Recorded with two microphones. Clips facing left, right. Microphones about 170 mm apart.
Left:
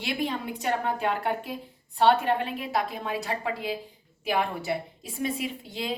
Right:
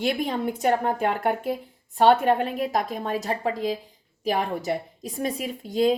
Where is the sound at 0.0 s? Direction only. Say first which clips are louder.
Right 5 dB; 45° right (ahead or behind).